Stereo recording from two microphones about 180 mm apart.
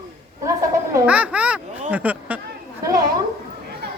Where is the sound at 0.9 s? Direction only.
5° right (ahead or behind).